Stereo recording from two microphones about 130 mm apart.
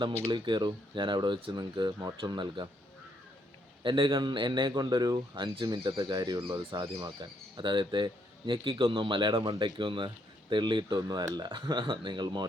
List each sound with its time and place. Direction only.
0.3 s a man's voice: 35° right (ahead or behind)
3.8 s a man's voice: 35° right (ahead or behind)